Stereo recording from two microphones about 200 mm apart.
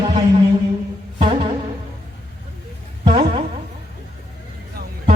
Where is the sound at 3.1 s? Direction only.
25° right (ahead or behind).